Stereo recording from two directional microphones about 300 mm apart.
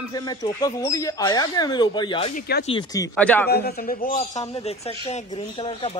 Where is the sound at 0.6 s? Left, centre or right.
Centre.